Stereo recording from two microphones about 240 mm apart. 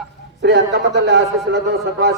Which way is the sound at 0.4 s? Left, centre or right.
Right.